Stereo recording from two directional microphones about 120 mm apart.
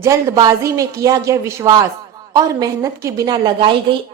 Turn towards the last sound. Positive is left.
turn(degrees=-40)  # may be behind; listen again after turning